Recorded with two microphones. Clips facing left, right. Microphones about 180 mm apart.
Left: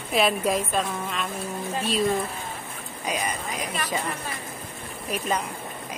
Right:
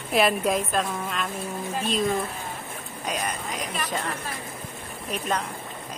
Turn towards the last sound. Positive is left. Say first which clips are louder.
# left 1 dB
turn(degrees=5)  # may be behind; listen again after turning